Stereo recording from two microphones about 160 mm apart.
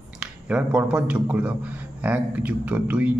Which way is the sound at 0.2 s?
5° right (ahead or behind).